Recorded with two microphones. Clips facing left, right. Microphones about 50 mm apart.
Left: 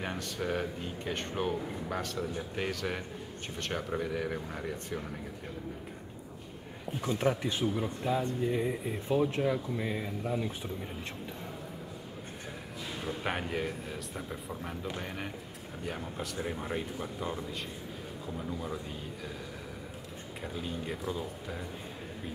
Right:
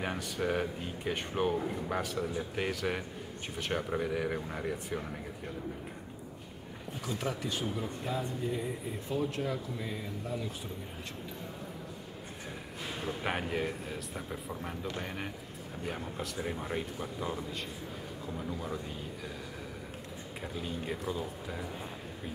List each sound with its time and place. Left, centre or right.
0.0 s speech: centre
7.0 s speech: left
13.0 s speech: centre
20.5 s speech: centre